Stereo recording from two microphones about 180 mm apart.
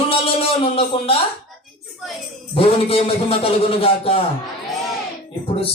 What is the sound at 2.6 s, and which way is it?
A man's voice, 30° left (ahead or behind).